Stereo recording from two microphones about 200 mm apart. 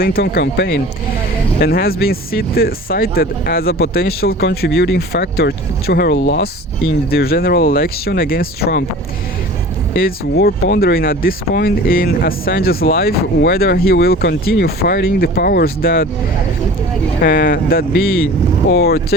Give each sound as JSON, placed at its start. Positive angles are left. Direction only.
{"t": 0.0, "sound": "speech", "side_deg": 50}
{"t": 9.9, "sound": "speech", "side_deg": 50}
{"t": 17.2, "sound": "speech", "side_deg": 45}